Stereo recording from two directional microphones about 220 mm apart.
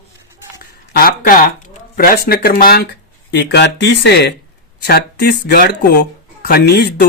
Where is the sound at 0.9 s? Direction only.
40° left (ahead or behind).